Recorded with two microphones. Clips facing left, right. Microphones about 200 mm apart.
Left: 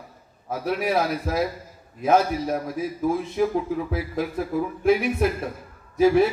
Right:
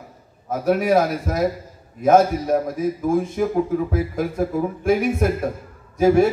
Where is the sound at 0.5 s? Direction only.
45° right (ahead or behind).